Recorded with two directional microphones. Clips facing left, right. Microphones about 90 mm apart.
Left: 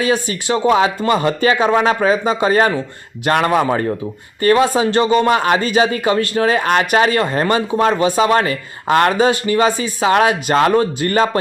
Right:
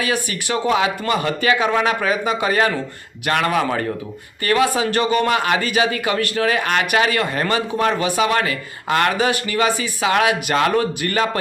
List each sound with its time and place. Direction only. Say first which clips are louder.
0.0 s a man's voice: left 5 dB; 30° left (ahead or behind)